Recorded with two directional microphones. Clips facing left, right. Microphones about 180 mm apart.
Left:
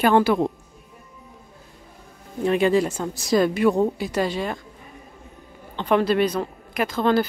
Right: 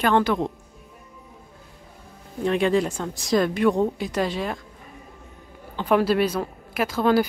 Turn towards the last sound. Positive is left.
turn(degrees=-10)  # may be behind; listen again after turning